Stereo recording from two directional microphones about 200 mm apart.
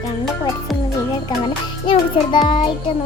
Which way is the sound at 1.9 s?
25° left (ahead or behind).